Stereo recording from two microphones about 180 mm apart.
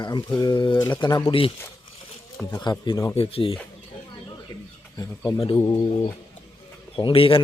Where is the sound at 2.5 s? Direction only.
25° left (ahead or behind).